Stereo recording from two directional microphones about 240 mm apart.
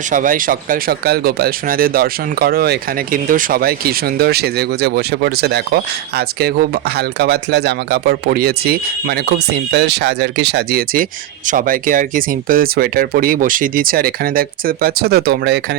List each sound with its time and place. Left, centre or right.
0.1 s speech: right